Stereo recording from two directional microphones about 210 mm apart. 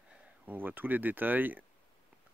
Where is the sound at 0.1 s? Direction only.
10° right (ahead or behind).